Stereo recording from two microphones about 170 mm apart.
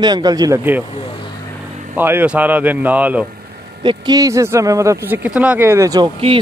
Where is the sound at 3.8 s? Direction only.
25° right (ahead or behind).